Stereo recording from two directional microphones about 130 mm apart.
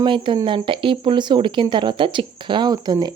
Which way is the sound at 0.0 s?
40° right (ahead or behind).